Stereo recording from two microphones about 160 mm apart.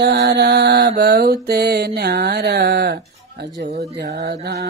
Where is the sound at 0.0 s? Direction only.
90° right.